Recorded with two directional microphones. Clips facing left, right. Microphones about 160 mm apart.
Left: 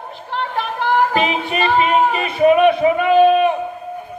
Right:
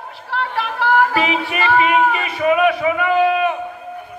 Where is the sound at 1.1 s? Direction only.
25° left (ahead or behind).